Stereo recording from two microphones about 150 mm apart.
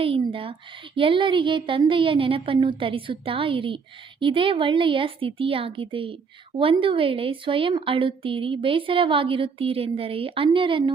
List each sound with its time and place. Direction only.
0.0 s a woman's voice: 35° right (ahead or behind)